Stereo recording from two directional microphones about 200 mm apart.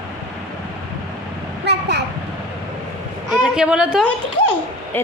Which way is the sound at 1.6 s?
55° right (ahead or behind).